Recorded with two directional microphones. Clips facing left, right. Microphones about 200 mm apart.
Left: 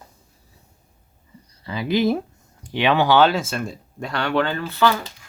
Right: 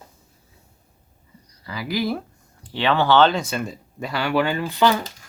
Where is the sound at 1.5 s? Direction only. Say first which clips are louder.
Left 5 dB; 25° left (ahead or behind); by 4.9 s 15° right (ahead or behind).